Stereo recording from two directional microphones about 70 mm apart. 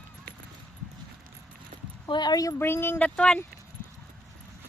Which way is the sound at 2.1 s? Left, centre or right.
Left.